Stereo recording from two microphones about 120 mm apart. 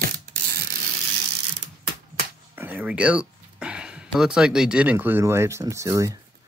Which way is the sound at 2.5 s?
15° right (ahead or behind).